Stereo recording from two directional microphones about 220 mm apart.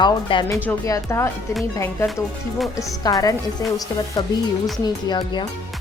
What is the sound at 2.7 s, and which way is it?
A woman's voice, 15° left (ahead or behind).